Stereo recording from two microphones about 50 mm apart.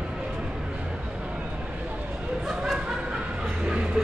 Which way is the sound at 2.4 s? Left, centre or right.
Centre.